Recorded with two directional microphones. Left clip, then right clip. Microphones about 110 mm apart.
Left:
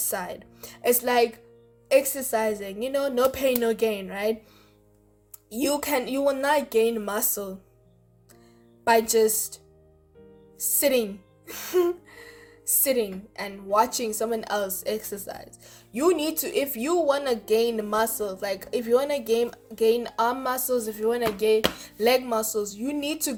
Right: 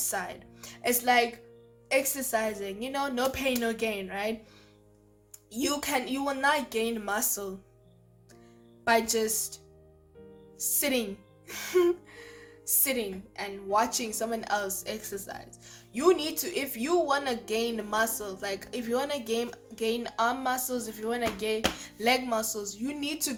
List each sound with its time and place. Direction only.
0.0 s a woman's voice: 45° left (ahead or behind)
5.5 s speech: 45° left (ahead or behind)
8.8 s speech: 45° left (ahead or behind)
10.6 s a woman's voice: 45° left (ahead or behind)